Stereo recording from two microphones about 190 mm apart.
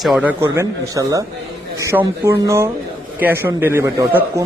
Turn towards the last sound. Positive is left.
turn(degrees=-15)  # may be behind; listen again after turning